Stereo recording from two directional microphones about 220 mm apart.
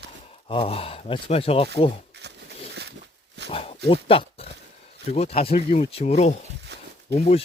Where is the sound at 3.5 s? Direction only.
25° left (ahead or behind).